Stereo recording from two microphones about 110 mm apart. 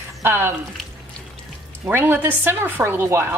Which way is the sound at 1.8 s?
20° right (ahead or behind).